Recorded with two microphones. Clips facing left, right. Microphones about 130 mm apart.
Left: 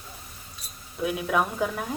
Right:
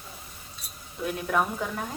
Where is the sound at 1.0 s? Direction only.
5° left (ahead or behind).